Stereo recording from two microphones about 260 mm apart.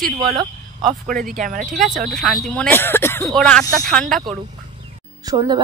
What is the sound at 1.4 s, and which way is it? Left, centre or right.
Speech, right.